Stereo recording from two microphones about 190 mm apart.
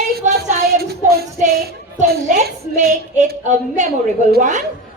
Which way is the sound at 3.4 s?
40° right (ahead or behind).